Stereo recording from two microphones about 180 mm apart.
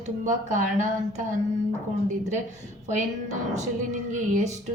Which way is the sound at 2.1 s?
40° right (ahead or behind).